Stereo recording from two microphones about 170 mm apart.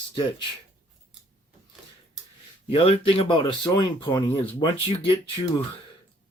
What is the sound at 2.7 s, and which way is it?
Speech, 35° left (ahead or behind).